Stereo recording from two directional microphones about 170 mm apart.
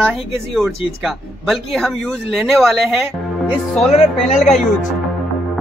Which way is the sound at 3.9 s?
45° left (ahead or behind).